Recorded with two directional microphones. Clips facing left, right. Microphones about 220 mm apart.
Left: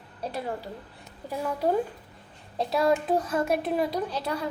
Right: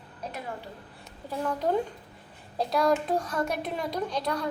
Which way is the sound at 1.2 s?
10° left (ahead or behind).